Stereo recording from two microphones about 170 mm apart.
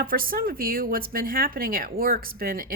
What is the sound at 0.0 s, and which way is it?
Speech, 60° right (ahead or behind).